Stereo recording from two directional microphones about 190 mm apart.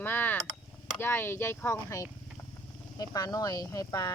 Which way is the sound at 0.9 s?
10° left (ahead or behind).